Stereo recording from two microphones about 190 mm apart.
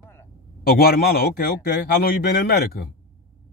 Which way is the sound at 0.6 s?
50° left (ahead or behind).